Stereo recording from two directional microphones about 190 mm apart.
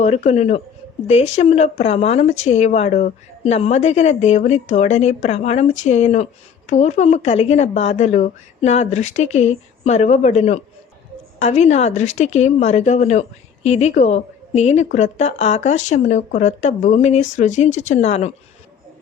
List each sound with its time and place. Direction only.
0.0 s a woman's voice: 35° left (ahead or behind)